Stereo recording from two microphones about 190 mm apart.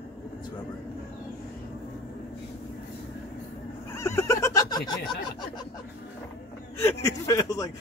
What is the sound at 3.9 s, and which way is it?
Neigh, 15° left (ahead or behind).